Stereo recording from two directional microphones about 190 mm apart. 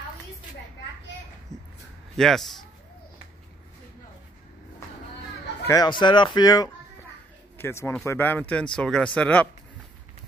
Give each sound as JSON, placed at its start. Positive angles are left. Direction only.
{"t": 1.5, "sound": "a sound", "side_deg": 0}
{"t": 2.1, "sound": "speech", "side_deg": 0}
{"t": 5.7, "sound": "speech", "side_deg": 20}